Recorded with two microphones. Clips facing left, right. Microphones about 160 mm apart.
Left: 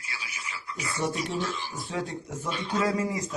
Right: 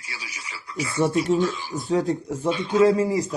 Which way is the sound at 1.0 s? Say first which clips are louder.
Right 10 dB; 50° right (ahead or behind).